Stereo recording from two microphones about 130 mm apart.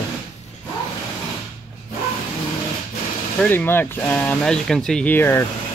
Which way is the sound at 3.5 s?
15° left (ahead or behind).